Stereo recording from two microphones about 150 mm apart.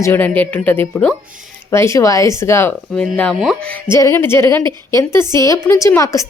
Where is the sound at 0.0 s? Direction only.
15° left (ahead or behind).